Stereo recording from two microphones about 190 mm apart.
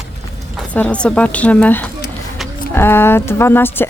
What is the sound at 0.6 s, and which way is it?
Speech, 5° left (ahead or behind).